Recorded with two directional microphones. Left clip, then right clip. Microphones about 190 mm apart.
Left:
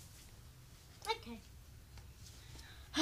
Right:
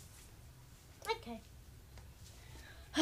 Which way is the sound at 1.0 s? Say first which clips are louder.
Right 1 dB; 45° left (ahead or behind).